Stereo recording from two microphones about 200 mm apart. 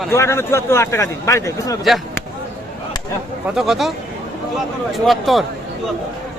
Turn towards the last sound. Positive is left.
turn(degrees=0)  # may be behind; listen again after turning